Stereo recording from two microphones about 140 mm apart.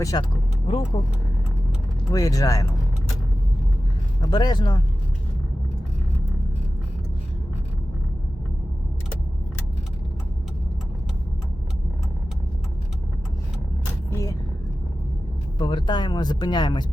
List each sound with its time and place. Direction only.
0.0 s speech: 25° left (ahead or behind)
2.1 s speech: 25° left (ahead or behind)
4.2 s speech: 30° left (ahead or behind)
14.1 s vehicle: 20° left (ahead or behind)
15.5 s speech: 30° left (ahead or behind)